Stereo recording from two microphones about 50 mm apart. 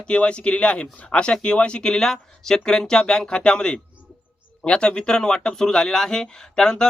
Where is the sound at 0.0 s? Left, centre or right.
Left.